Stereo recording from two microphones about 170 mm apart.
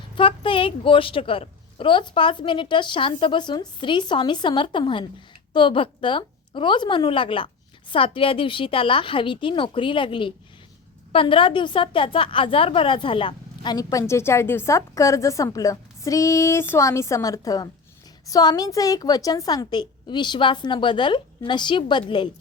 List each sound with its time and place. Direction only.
0.2 s a woman's voice: 30° left (ahead or behind)